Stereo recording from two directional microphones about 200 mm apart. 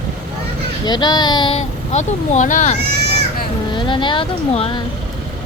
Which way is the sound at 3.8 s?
25° left (ahead or behind).